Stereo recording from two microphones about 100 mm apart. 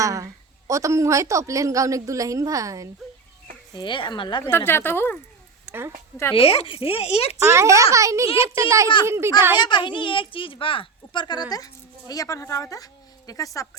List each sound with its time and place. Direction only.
0.0 s a woman's voice: 35° right (ahead or behind)
3.8 s a woman's voice: 55° left (ahead or behind)
4.4 s speech: 20° left (ahead or behind)
5.6 s a woman's voice: 25° right (ahead or behind)
6.3 s speech: 70° left (ahead or behind)
7.3 s a woman's voice: 30° right (ahead or behind)
9.6 s a woman's voice: 50° left (ahead or behind); by 13.7 s 35° left (ahead or behind)